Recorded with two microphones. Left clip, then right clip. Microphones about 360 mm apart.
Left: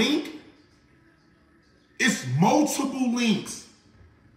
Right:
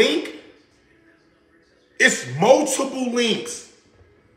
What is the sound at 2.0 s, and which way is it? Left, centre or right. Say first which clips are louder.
A man's voice: right 8 dB; centre.